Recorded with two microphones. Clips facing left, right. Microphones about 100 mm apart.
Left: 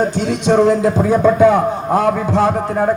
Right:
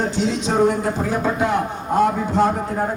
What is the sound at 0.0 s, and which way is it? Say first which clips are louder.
Speech: left 4 dB; 55° left (ahead or behind).